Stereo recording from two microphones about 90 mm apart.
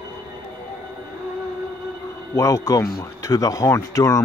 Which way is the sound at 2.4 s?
35° left (ahead or behind).